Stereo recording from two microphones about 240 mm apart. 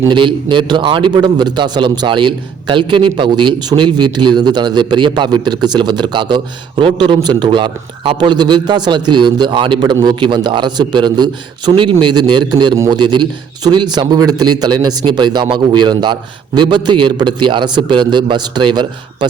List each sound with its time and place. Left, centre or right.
0.0 s a man's voice: centre